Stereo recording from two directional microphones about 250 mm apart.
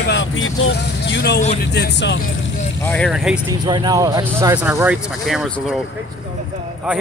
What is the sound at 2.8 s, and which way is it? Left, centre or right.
Speech, centre.